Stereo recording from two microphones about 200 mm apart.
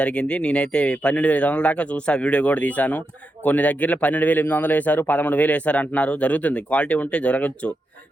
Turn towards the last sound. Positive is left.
turn(degrees=5)  # may be behind; listen again after turning